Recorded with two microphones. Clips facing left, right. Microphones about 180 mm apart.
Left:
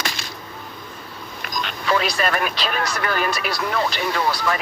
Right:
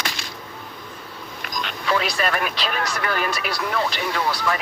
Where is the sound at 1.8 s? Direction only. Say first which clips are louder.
Left 2 dB; 40° left (ahead or behind).